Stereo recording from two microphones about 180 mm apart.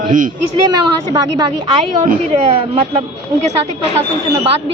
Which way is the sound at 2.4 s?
30° right (ahead or behind).